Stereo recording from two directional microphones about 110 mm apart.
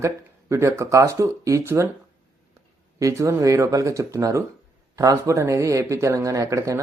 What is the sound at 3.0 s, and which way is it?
Speech, 30° right (ahead or behind).